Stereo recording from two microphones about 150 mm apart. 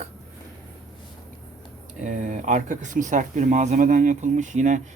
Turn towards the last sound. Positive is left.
turn(degrees=-55)  # may be behind; listen again after turning